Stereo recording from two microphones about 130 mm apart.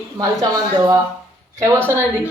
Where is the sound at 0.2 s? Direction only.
30° right (ahead or behind).